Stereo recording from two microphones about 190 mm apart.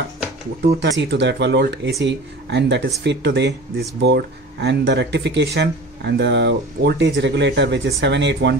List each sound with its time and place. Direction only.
0.6 s speech: 60° right (ahead or behind)